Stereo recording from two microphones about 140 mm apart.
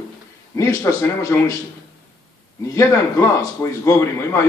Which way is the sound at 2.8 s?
20° left (ahead or behind).